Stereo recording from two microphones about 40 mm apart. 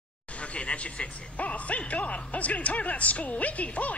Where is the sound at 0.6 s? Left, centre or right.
Left.